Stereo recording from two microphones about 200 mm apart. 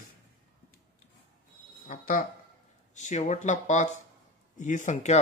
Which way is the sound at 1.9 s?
45° left (ahead or behind).